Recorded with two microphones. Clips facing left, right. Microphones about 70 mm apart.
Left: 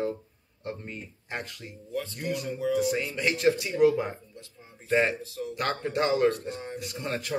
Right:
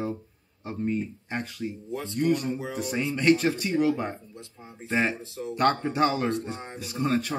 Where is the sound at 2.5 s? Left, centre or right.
Right.